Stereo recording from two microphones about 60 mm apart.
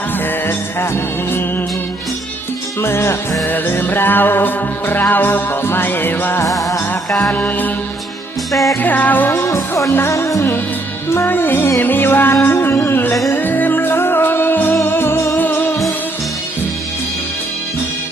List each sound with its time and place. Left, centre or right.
0.5 s music: left
2.8 s music: left
3.4 s music: left
7.2 s mantra: left
8.7 s music: left
9.3 s music: left
11.1 s music: left